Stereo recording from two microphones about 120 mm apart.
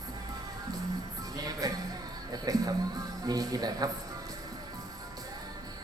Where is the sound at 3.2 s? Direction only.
30° right (ahead or behind).